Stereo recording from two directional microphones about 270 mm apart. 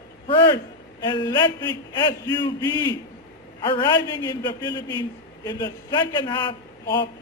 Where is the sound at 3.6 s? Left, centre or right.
Centre.